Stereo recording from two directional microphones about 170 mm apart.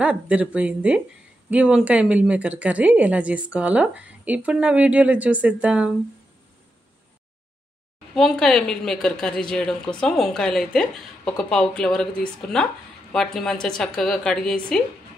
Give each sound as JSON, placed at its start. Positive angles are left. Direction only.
{"t": 0.0, "sound": "a woman's voice", "side_deg": -5}
{"t": 8.1, "sound": "a woman's voice", "side_deg": 5}